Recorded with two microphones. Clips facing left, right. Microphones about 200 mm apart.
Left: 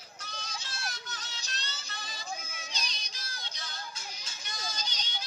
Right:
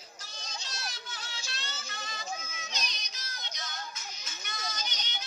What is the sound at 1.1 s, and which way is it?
Music, 40° left (ahead or behind).